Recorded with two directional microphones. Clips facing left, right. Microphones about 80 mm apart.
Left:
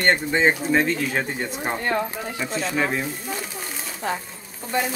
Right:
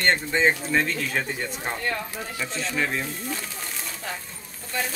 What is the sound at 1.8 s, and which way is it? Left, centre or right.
Speech, left.